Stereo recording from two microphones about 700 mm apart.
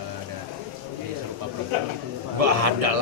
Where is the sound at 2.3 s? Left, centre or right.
Right.